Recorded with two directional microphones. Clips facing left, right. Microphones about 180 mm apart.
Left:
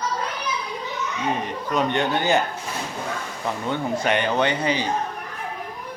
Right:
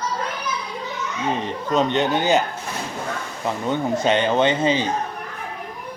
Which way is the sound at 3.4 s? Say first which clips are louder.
Right 3 dB; 20° right (ahead or behind).